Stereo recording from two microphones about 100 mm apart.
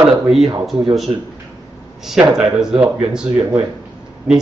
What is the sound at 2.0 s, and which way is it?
A man's voice, 5° right (ahead or behind).